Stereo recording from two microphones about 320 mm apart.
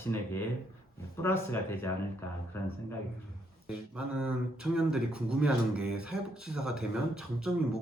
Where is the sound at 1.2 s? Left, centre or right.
Centre.